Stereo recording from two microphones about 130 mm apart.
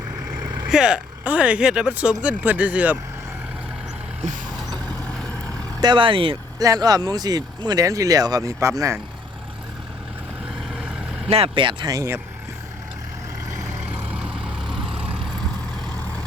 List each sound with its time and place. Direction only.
0.4 s speech: 5° right (ahead or behind)
4.7 s vehicle: 5° left (ahead or behind)
5.8 s speech: 40° right (ahead or behind)
6.6 s speech: 30° right (ahead or behind)
10.5 s vehicle: 5° right (ahead or behind)
11.3 s speech: 45° right (ahead or behind)
11.9 s speech: 20° right (ahead or behind)
14.1 s vehicle: 10° right (ahead or behind)